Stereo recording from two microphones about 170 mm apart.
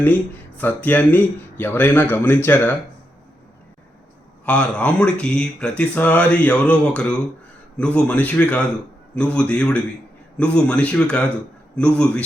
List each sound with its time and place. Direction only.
0.0 s speech: 10° left (ahead or behind)
4.4 s speech: 5° left (ahead or behind)